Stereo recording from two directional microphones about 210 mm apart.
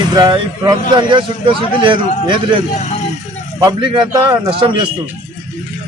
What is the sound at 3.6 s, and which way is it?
Speech, 20° right (ahead or behind).